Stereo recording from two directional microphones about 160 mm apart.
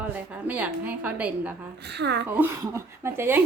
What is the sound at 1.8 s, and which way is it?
Speech, 90° right.